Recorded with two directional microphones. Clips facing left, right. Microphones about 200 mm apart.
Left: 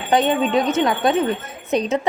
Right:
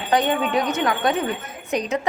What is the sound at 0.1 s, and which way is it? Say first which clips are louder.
A woman's voice: left 3 dB; 25° left (ahead or behind).